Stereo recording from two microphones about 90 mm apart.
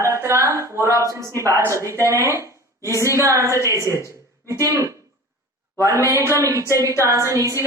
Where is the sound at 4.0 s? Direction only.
35° right (ahead or behind).